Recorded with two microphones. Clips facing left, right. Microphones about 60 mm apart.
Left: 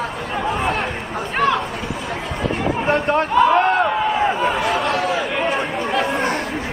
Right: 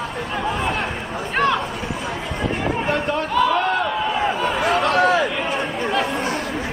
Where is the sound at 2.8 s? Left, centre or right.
Left.